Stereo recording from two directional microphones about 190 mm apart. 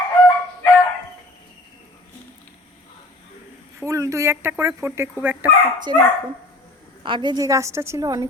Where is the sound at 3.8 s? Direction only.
15° right (ahead or behind).